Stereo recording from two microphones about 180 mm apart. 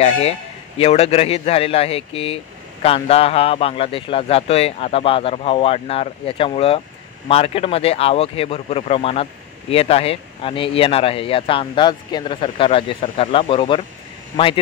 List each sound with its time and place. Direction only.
0.0 s a man's voice: 35° left (ahead or behind)